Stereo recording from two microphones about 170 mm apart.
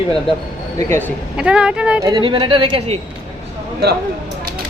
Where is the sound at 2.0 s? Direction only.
25° right (ahead or behind).